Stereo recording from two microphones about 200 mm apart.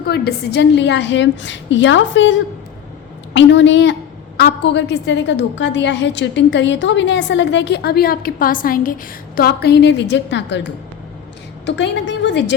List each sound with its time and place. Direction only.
0.0 s a woman's voice: 55° left (ahead or behind)
11.6 s a woman's voice: 65° left (ahead or behind)